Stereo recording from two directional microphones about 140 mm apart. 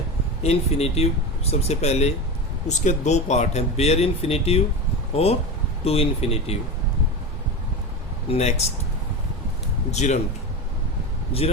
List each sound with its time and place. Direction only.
0.4 s speech: 50° left (ahead or behind)
8.3 s speech: 50° left (ahead or behind)
9.9 s speech: 55° left (ahead or behind)
11.3 s speech: 45° left (ahead or behind)